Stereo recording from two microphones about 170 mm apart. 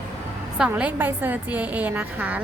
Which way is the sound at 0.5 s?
5° right (ahead or behind).